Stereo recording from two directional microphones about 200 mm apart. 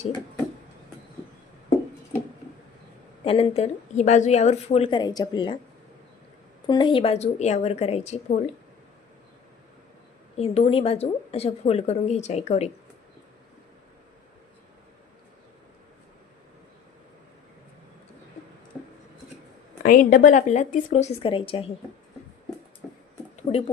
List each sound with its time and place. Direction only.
3.2 s a woman's voice: 30° left (ahead or behind)
6.7 s a woman's voice: 25° left (ahead or behind)
10.3 s a woman's voice: 30° left (ahead or behind)
19.8 s a woman's voice: 45° left (ahead or behind); by 21.7 s 25° left (ahead or behind)
23.4 s a sound: 30° left (ahead or behind)